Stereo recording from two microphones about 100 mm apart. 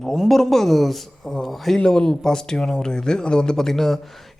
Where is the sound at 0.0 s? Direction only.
Centre (ahead or behind).